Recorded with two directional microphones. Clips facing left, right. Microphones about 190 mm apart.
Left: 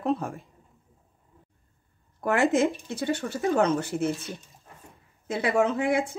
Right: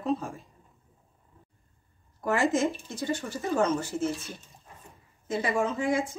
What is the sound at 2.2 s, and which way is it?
Speech, 60° left (ahead or behind).